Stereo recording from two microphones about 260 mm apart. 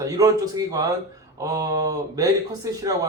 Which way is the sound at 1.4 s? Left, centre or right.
Centre.